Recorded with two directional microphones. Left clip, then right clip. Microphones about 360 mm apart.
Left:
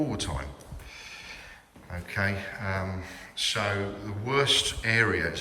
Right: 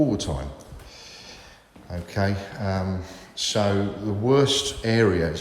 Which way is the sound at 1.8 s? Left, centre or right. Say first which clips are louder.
Right 3 dB; centre.